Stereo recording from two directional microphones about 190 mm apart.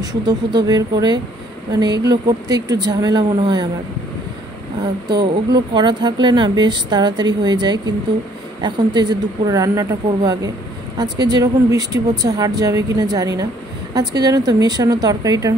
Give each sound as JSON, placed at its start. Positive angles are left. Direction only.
{"t": 0.0, "sound": "speech", "side_deg": -20}
{"t": 5.0, "sound": "speech", "side_deg": -25}